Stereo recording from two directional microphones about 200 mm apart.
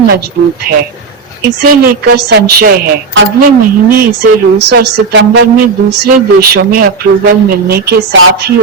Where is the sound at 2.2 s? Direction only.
55° right (ahead or behind).